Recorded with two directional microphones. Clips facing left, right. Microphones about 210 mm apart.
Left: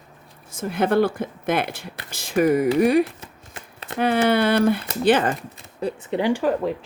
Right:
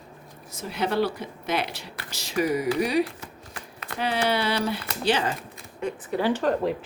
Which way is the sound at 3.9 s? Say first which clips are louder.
Left 6 dB; 55° left (ahead or behind).